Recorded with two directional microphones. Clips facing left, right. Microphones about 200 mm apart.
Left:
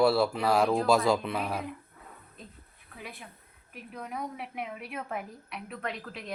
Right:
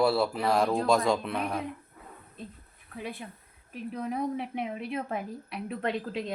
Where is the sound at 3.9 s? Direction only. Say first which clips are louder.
Right 7 dB; 30° right (ahead or behind).